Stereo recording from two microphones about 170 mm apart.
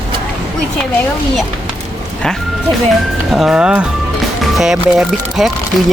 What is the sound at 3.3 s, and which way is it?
Speech, 5° right (ahead or behind).